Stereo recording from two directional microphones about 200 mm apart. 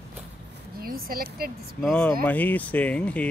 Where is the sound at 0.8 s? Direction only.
45° right (ahead or behind).